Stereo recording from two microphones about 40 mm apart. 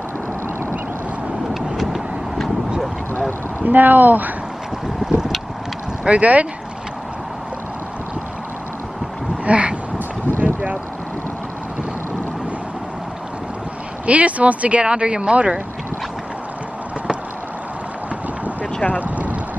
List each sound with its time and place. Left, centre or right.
1.5 s vehicle: centre
3.6 s speech: right
5.0 s boat: centre
6.0 s speech: right
9.4 s a sound: right
10.4 s boat: right
14.0 s speech: right
19.0 s boat: right